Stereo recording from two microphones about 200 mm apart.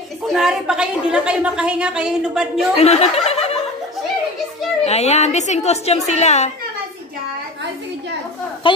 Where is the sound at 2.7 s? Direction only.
35° left (ahead or behind).